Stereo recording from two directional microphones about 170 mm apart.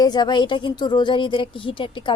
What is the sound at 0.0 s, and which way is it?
A woman's voice, 25° left (ahead or behind).